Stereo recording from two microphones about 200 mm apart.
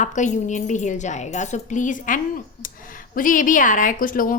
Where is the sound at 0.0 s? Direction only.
35° left (ahead or behind).